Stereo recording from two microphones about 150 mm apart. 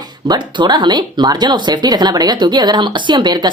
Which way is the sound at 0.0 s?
30° right (ahead or behind).